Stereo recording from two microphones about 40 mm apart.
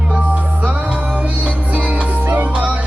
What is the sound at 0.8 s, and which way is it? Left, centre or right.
Music, right.